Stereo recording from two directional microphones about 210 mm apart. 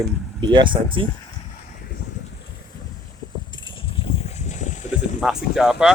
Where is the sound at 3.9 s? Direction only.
35° left (ahead or behind).